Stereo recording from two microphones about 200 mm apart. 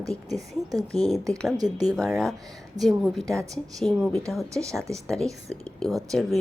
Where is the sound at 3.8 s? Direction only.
Centre (ahead or behind).